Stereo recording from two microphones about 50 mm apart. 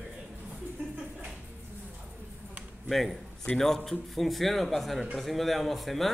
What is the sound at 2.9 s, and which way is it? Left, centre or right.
A man's voice, centre.